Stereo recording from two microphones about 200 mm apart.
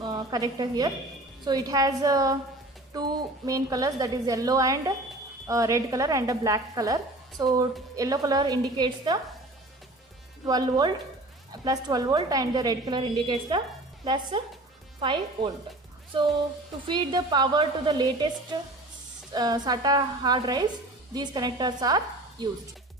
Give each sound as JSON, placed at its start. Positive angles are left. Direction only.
{"t": 0.0, "sound": "a woman's voice", "side_deg": -20}
{"t": 3.4, "sound": "a woman's voice", "side_deg": -15}
{"t": 10.4, "sound": "a woman's voice", "side_deg": -20}
{"t": 16.9, "sound": "a woman's voice", "side_deg": -20}
{"t": 19.3, "sound": "a woman's voice", "side_deg": -20}